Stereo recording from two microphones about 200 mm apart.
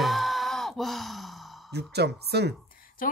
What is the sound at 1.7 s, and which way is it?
Speech, 55° right (ahead or behind).